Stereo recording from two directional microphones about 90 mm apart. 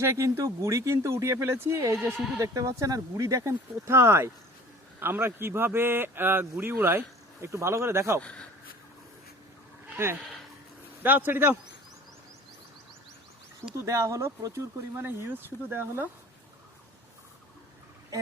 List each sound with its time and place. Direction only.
0.0 s a man's voice: 30° right (ahead or behind)
8.2 s speech: 10° left (ahead or behind)
10.0 s a man's voice: 25° right (ahead or behind)
13.7 s a man's voice: 35° right (ahead or behind)